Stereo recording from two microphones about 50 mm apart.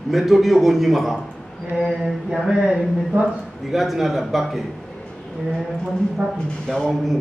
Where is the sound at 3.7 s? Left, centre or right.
Centre.